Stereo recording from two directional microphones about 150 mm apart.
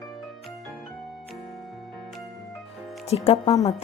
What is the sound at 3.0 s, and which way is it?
Speech, 45° left (ahead or behind).